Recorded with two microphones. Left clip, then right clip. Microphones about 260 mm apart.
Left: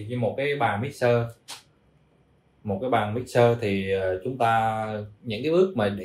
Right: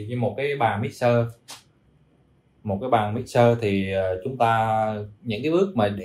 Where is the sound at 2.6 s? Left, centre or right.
Right.